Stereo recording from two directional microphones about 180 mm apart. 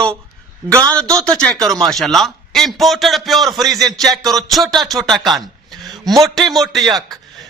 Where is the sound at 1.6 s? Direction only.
20° right (ahead or behind).